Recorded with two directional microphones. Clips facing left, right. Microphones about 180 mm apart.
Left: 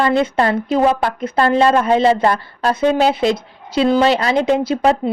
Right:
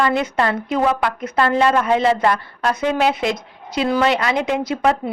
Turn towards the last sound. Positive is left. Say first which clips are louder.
# left 4 dB
turn(degrees=30)  # may be behind; listen again after turning